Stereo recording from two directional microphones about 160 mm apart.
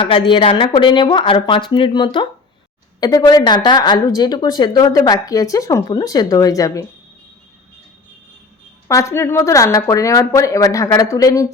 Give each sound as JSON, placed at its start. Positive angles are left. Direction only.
{"t": 0.0, "sound": "speech", "side_deg": 30}
{"t": 8.9, "sound": "speech", "side_deg": 20}